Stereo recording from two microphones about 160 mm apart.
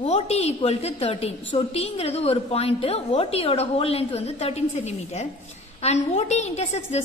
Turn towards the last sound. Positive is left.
turn(degrees=45)  # may be behind; listen again after turning